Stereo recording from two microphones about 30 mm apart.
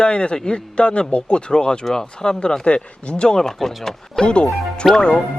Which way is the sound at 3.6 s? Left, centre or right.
Centre.